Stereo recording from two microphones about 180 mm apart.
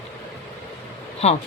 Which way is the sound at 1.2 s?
35° left (ahead or behind).